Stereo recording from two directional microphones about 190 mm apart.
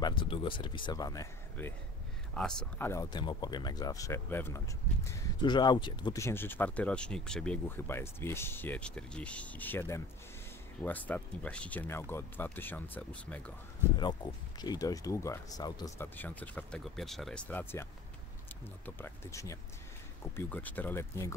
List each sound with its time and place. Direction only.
0.0 s speech: 25° left (ahead or behind); by 13.4 s 10° left (ahead or behind)
13.8 s speech: 10° right (ahead or behind)
14.6 s speech: 20° left (ahead or behind)
18.9 s speech: 10° left (ahead or behind)